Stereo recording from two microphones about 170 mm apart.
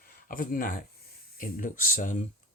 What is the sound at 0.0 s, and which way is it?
Speech, 60° left (ahead or behind).